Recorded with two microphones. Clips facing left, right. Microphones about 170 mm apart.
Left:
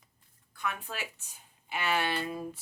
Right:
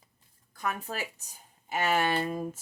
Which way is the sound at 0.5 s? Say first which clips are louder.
Right 3 dB; 40° right (ahead or behind).